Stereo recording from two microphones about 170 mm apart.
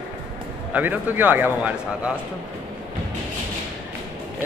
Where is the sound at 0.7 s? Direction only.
10° right (ahead or behind).